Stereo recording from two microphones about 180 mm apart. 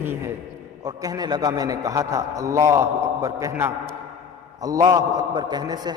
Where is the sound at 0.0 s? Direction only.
15° right (ahead or behind).